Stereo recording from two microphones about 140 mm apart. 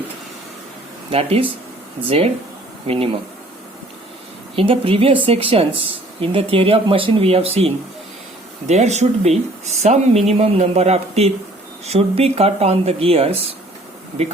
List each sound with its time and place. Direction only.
1.1 s speech: 45° right (ahead or behind)
4.5 s speech: 40° right (ahead or behind)